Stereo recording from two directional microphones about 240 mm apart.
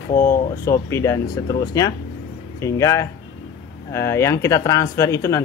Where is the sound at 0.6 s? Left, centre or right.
Centre.